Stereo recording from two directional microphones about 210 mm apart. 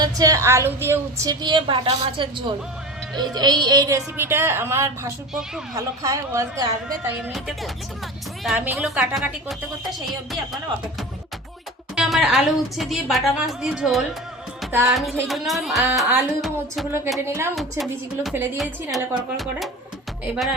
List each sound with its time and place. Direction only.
0.0 s a woman's voice: 15° right (ahead or behind)
5.7 s a woman's voice: 15° right (ahead or behind)
11.9 s a woman's voice: centre (ahead or behind)
14.7 s music: 10° right (ahead or behind)
14.9 s a woman's voice: centre (ahead or behind)
17.2 s a woman's voice: 10° right (ahead or behind)
17.5 s a woman's voice: centre (ahead or behind)